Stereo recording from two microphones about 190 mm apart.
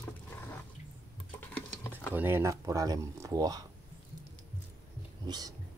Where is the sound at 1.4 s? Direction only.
10° left (ahead or behind).